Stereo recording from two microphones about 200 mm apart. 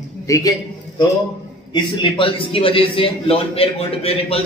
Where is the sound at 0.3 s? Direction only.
20° left (ahead or behind).